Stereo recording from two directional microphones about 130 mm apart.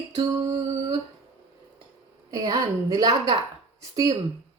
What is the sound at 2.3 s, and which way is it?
A woman's voice, 30° right (ahead or behind).